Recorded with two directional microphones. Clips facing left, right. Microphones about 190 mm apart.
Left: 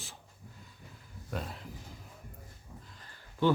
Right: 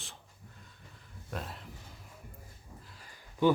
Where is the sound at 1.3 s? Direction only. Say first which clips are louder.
Left 2 dB; centre (ahead or behind).